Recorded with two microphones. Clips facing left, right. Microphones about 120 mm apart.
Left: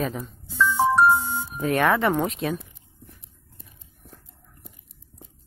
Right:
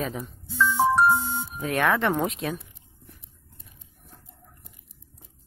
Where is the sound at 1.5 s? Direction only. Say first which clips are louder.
Left 3 dB; centre (ahead or behind).